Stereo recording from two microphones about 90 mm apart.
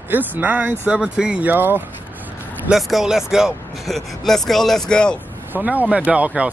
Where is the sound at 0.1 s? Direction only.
20° right (ahead or behind).